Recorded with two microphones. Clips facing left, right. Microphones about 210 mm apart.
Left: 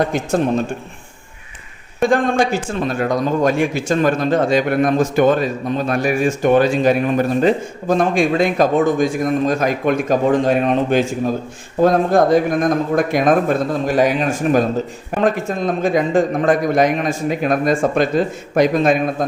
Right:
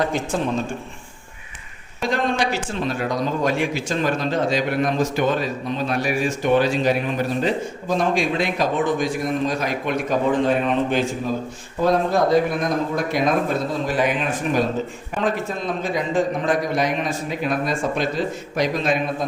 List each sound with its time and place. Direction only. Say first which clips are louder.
2.0 s a man's voice: left 7 dB; 50° left (ahead or behind)